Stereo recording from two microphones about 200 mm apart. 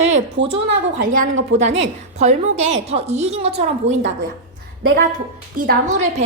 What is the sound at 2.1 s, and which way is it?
A woman's voice, 35° right (ahead or behind).